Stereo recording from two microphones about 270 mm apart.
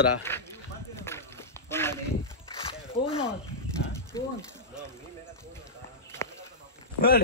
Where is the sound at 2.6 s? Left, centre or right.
Left.